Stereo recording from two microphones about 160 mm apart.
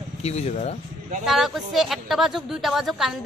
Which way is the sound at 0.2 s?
45° left (ahead or behind).